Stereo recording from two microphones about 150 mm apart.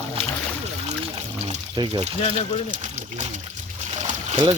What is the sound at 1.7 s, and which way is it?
Speech, 35° right (ahead or behind).